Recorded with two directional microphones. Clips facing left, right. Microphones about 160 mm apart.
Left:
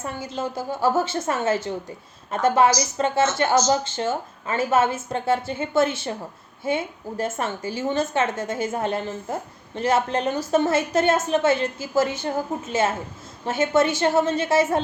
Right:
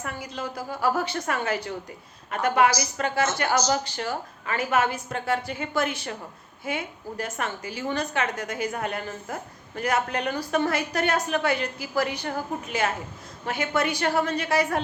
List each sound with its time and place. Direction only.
0.0 s a woman's voice: 25° left (ahead or behind)